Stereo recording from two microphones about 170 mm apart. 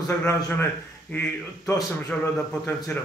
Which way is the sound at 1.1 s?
15° left (ahead or behind).